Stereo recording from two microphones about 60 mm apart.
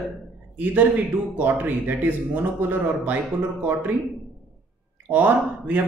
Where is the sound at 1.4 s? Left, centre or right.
Right.